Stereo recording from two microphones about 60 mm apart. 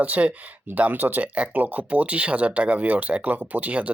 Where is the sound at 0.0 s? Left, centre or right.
Right.